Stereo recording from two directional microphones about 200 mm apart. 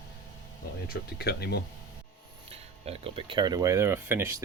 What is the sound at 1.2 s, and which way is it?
Speech, 55° left (ahead or behind).